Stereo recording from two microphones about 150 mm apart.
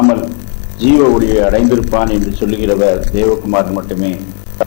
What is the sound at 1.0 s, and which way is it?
A man's voice, 20° left (ahead or behind).